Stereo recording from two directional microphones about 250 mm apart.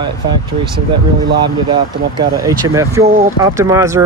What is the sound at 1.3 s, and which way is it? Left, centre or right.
Speech, centre.